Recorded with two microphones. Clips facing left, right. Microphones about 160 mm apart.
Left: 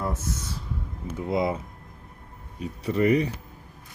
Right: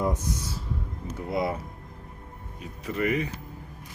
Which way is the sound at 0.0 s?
15° right (ahead or behind).